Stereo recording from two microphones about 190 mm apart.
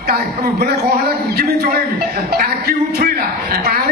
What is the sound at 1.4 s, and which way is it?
Speech, 55° right (ahead or behind).